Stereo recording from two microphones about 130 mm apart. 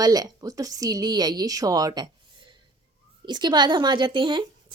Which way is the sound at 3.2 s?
35° right (ahead or behind).